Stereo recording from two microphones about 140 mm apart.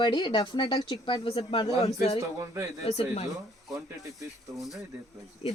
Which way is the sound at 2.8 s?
50° left (ahead or behind).